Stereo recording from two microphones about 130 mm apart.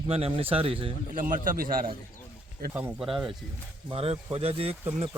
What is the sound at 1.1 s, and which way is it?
Speech, 90° right.